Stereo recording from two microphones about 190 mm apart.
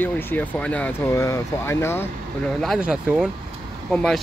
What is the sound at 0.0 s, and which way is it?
Speech, 10° left (ahead or behind).